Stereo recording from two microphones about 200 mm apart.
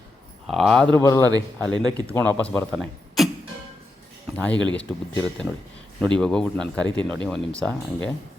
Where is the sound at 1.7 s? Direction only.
20° right (ahead or behind).